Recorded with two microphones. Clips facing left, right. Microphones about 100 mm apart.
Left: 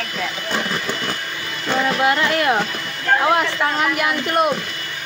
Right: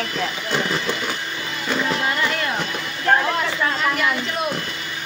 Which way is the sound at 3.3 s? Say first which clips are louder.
Left 4 dB; 65° left (ahead or behind).